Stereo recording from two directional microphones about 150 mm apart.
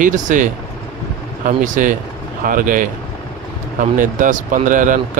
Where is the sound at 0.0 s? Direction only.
60° right (ahead or behind).